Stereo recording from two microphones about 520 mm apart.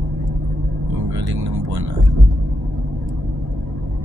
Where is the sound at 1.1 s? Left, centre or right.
Right.